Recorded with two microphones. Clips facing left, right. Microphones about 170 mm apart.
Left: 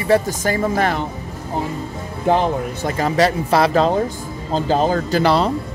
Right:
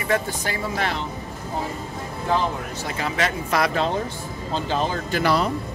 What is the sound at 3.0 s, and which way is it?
Speech, 35° left (ahead or behind).